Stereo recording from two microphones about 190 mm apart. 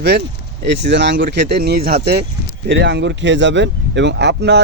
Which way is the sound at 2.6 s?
65° right (ahead or behind).